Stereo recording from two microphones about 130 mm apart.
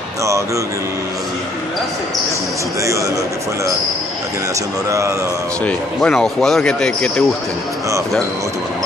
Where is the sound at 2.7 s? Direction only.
25° right (ahead or behind).